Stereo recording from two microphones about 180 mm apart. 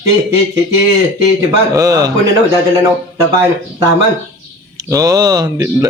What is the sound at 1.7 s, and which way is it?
Speech, 20° right (ahead or behind).